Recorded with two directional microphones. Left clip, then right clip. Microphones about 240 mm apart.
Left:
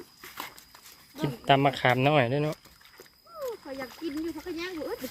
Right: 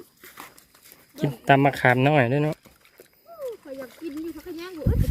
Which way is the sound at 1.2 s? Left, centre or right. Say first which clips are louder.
Right 4 dB; right.